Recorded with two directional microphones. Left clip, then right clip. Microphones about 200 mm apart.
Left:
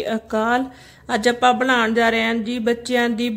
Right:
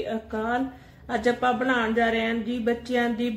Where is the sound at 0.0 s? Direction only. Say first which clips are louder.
Left 8 dB; 55° left (ahead or behind).